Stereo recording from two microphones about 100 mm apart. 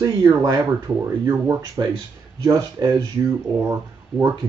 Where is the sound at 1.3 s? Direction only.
35° right (ahead or behind).